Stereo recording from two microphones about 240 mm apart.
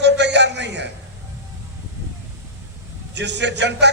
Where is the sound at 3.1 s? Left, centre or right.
Right.